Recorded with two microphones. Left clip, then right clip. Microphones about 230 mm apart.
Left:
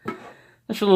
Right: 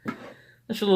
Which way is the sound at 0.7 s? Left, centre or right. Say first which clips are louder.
Left 4 dB; left.